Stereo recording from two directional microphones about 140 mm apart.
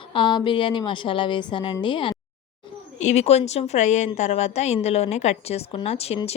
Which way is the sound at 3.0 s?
50° left (ahead or behind).